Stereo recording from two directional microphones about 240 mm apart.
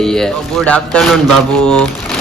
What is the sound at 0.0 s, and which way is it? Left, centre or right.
Speech, centre.